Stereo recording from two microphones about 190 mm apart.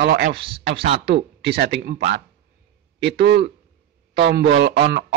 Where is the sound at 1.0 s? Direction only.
60° right (ahead or behind).